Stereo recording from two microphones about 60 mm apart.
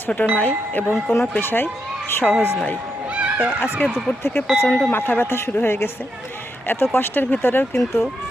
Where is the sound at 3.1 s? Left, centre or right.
Centre.